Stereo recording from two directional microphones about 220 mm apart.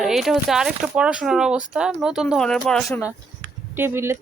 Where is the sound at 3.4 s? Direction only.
50° right (ahead or behind).